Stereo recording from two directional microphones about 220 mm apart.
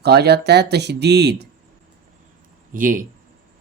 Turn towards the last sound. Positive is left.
turn(degrees=-35)  # may be behind; listen again after turning